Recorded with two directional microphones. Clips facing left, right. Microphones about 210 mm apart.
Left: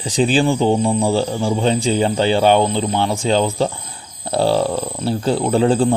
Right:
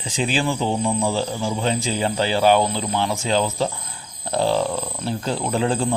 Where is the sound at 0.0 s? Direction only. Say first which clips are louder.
Left 7 dB; 35° left (ahead or behind).